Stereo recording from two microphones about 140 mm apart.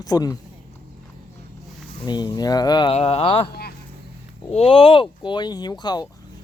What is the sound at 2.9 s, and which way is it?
Speech, 45° left (ahead or behind).